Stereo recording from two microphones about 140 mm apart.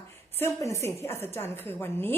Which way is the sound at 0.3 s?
20° left (ahead or behind).